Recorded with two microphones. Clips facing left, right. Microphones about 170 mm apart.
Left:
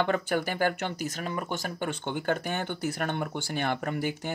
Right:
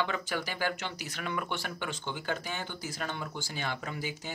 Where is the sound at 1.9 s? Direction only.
55° left (ahead or behind).